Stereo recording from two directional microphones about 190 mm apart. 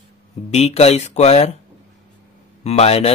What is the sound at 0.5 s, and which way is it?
Speech, 35° left (ahead or behind).